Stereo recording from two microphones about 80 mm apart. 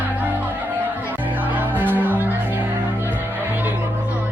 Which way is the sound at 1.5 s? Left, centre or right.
Right.